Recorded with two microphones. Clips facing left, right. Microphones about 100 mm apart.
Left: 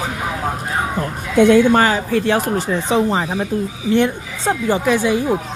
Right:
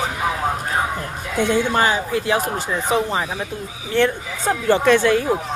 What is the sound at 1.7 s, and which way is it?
A man's voice, 45° left (ahead or behind).